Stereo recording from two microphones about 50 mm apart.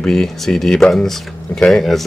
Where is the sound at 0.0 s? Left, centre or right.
Centre.